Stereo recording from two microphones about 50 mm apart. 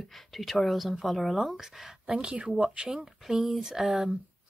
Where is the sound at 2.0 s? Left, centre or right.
Right.